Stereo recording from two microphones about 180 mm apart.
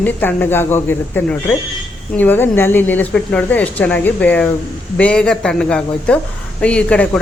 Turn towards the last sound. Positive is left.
turn(degrees=5)  # may be behind; listen again after turning